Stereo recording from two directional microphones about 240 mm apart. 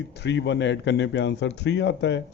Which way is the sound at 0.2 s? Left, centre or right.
Left.